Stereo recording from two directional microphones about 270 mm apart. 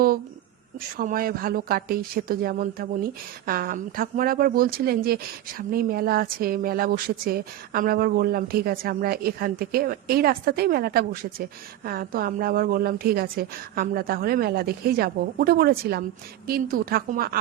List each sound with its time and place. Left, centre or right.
0.9 s a woman's voice: right